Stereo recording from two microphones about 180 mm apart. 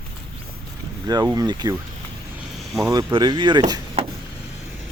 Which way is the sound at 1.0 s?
20° right (ahead or behind).